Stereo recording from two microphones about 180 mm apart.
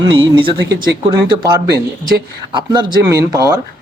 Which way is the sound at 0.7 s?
70° right (ahead or behind).